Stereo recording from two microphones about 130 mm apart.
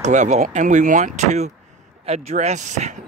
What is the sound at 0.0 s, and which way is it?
Speech, 65° right (ahead or behind).